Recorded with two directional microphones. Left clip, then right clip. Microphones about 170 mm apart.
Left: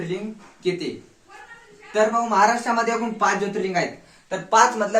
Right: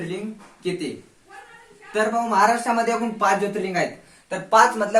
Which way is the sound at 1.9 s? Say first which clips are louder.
Left 1 dB; 10° left (ahead or behind).